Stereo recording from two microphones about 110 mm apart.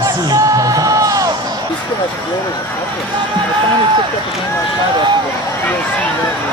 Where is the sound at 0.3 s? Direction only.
30° right (ahead or behind).